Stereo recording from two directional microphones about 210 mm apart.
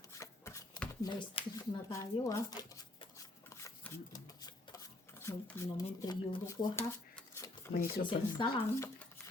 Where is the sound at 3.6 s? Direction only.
15° left (ahead or behind).